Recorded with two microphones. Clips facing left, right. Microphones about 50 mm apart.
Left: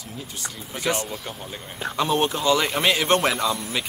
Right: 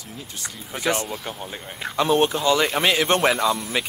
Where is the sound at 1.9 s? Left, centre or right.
Centre.